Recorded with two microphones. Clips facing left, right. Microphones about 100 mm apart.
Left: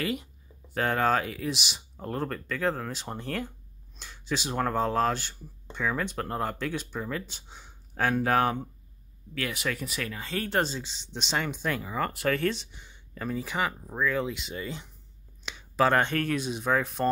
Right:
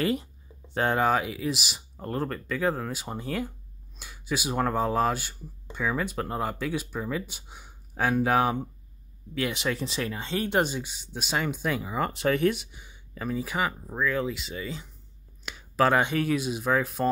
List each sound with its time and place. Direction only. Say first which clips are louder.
0.0 s speech: right 4 dB; 30° right (ahead or behind)
0.7 s speech: right 1 dB; 20° right (ahead or behind)
9.3 s speech: right 3 dB; 20° right (ahead or behind); by 17.1 s centre (ahead or behind)